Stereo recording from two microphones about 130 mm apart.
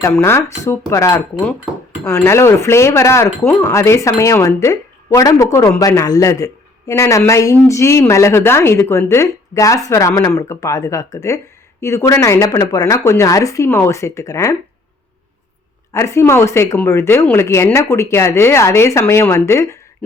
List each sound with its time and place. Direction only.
0.0 s speech: 20° left (ahead or behind)
15.9 s speech: 20° left (ahead or behind)